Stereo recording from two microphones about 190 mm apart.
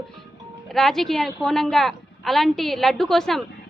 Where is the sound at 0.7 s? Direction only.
Centre (ahead or behind).